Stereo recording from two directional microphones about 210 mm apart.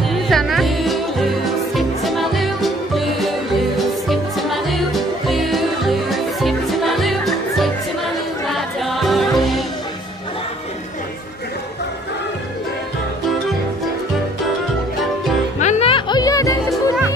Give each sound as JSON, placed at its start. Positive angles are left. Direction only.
{"t": 0.0, "sound": "music", "side_deg": 0}
{"t": 15.6, "sound": "music", "side_deg": 30}